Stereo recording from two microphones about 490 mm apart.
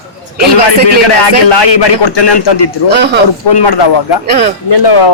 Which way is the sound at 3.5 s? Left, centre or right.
Left.